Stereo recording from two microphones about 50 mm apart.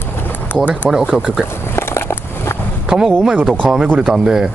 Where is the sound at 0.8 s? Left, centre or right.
Right.